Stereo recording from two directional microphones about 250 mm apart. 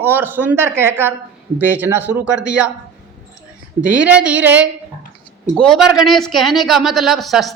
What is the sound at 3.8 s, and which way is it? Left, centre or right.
Speech, centre.